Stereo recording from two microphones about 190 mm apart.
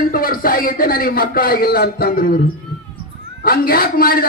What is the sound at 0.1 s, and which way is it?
A man's voice, 50° left (ahead or behind).